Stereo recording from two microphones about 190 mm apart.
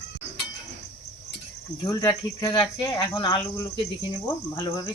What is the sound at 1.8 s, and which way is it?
Speech, 20° left (ahead or behind).